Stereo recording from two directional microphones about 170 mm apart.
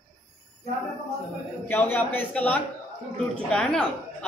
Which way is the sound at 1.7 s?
10° left (ahead or behind).